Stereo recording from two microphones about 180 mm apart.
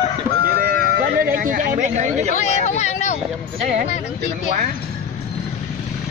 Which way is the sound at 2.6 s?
40° left (ahead or behind).